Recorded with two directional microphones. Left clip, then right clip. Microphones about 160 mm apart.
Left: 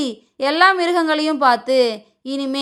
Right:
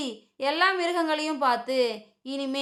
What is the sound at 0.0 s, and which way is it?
A woman's voice, 40° left (ahead or behind).